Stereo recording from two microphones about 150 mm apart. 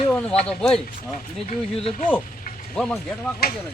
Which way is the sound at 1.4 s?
55° left (ahead or behind).